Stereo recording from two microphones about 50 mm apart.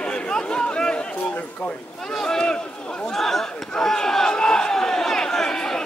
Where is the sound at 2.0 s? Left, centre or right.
Centre.